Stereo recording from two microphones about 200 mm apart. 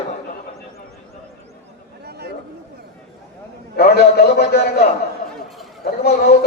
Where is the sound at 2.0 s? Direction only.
55° right (ahead or behind).